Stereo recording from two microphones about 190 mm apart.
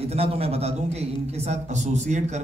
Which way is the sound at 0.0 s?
30° right (ahead or behind).